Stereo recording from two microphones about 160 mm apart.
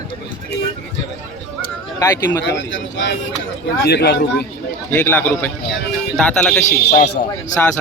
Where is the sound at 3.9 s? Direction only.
90° left.